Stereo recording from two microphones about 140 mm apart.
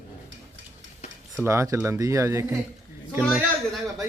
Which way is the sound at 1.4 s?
20° right (ahead or behind).